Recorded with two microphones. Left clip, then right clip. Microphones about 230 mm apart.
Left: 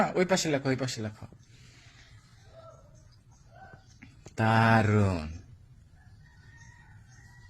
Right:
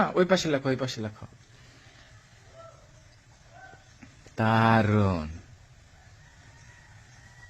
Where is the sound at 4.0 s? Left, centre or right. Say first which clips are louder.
Right 1 dB; centre.